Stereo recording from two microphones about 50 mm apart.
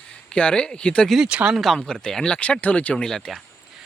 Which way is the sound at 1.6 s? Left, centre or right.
Centre.